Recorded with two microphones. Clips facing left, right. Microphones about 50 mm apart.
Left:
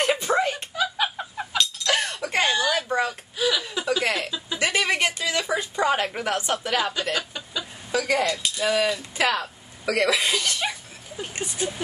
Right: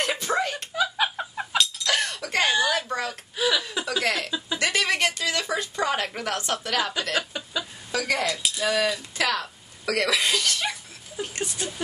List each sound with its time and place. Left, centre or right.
0.0 s a sound: centre
0.7 s bird: centre
1.6 s chink: centre
2.4 s a sound: centre
2.9 s whimper: centre
3.3 s chuckle: centre
3.8 s speech: centre
4.6 s a sound: centre
7.2 s chicken: centre
7.9 s speech: centre